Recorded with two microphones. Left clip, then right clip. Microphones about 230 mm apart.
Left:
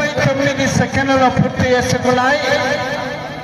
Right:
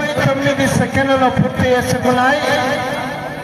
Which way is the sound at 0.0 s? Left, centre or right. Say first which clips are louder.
Even; left.